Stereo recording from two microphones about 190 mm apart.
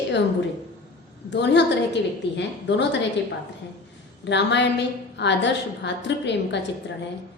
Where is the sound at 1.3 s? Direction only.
65° left (ahead or behind).